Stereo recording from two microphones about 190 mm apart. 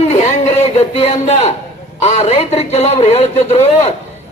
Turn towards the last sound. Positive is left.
turn(degrees=35)  # may be behind; listen again after turning